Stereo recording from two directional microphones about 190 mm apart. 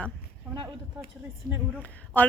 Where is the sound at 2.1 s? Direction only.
10° left (ahead or behind).